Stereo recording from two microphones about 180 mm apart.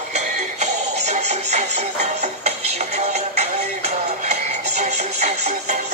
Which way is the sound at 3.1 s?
40° right (ahead or behind).